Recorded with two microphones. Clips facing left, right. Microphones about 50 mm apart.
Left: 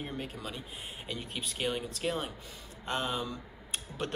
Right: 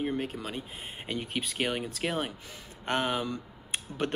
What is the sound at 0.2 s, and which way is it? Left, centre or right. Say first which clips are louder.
Speech: right 5 dB; right.